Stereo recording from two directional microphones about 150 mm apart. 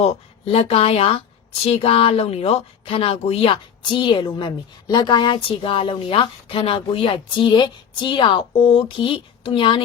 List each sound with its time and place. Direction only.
0.0 s speech: 40° left (ahead or behind)